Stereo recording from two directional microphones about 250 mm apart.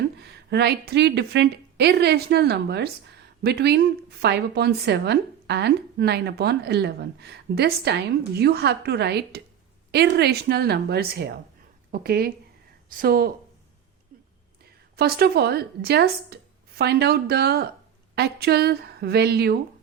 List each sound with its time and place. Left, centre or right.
0.2 s a woman's voice: right
14.9 s a woman's voice: right